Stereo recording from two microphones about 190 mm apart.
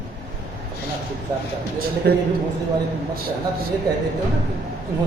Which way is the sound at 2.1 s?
55° right (ahead or behind).